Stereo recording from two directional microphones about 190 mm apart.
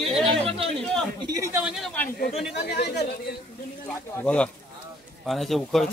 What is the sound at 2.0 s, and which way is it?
Speech, 50° left (ahead or behind).